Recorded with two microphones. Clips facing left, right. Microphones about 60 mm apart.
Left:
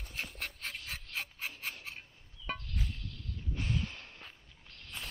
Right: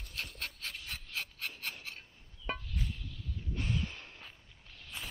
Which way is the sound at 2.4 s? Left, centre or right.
Centre.